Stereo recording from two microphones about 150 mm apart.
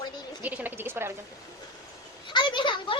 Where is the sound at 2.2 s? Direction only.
30° left (ahead or behind).